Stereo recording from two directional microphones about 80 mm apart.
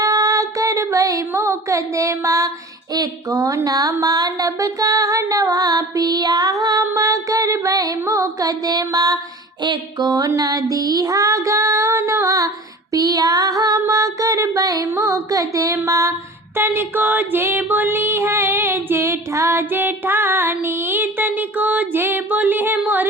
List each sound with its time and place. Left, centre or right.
0.0 s a sound: right
1.3 s music: right
2.9 s speech: right
9.6 s music: right
12.9 s speech: right
16.6 s speech: right
17.7 s music: right
19.1 s music: right